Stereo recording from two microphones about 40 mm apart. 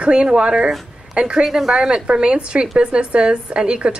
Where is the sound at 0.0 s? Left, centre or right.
Right.